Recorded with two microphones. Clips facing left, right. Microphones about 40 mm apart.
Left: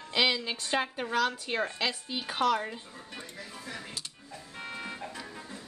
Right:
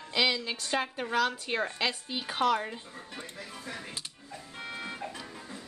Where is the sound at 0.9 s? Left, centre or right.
Centre.